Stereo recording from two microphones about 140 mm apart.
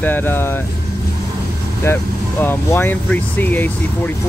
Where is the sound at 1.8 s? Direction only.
15° left (ahead or behind).